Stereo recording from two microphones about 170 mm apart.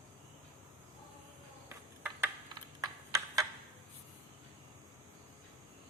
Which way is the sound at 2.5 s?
20° right (ahead or behind).